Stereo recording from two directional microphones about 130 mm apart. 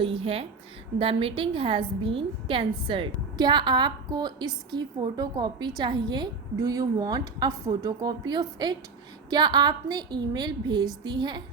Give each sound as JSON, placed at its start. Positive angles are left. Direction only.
{"t": 0.0, "sound": "a woman's voice", "side_deg": -45}